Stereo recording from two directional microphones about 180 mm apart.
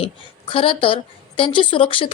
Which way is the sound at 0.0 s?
30° left (ahead or behind).